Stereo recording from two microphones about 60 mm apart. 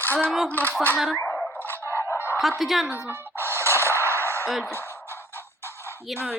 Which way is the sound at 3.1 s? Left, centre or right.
Right.